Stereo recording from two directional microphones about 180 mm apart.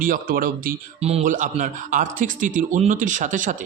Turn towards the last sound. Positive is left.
turn(degrees=-45)  # may be behind; listen again after turning